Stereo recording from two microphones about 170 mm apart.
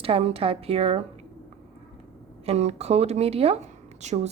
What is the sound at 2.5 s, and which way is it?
Speech, 40° right (ahead or behind).